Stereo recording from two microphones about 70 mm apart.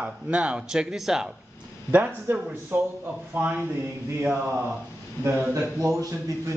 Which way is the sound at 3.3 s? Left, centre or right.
Centre.